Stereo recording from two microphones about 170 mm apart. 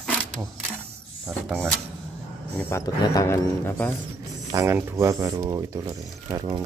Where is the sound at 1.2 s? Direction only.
Centre (ahead or behind).